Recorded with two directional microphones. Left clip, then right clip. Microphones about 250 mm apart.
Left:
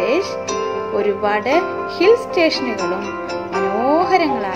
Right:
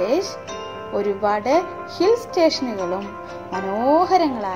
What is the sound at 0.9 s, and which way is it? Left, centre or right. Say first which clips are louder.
A woman's voice: left 2 dB; centre.